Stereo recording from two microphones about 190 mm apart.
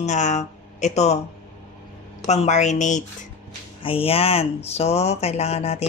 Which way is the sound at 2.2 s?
35° left (ahead or behind).